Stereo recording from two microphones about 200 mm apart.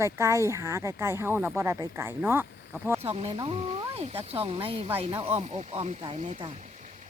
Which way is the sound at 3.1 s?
25° right (ahead or behind).